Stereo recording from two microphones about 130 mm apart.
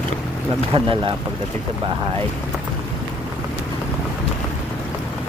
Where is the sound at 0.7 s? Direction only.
40° right (ahead or behind).